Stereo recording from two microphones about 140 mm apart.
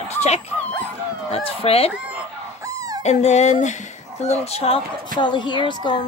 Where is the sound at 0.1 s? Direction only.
50° left (ahead or behind).